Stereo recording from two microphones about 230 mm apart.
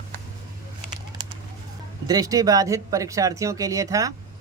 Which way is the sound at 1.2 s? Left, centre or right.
Centre.